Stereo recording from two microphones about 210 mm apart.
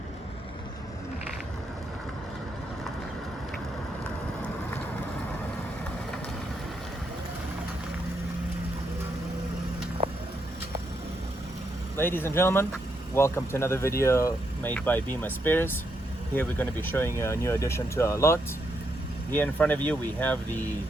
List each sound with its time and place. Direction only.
11.9 s speech: 10° left (ahead or behind)